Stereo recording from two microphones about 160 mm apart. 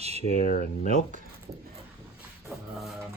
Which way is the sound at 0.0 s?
40° right (ahead or behind).